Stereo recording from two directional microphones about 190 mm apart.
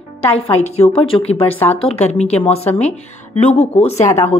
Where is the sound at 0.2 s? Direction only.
30° left (ahead or behind).